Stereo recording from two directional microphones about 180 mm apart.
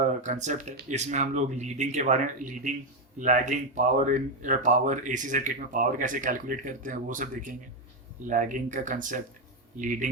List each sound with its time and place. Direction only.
0.2 s speech: 40° right (ahead or behind)